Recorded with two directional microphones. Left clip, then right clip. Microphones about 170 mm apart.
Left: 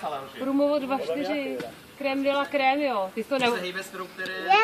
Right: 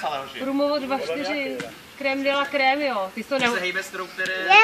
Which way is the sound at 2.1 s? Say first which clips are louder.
Right 3 dB; 45° left (ahead or behind).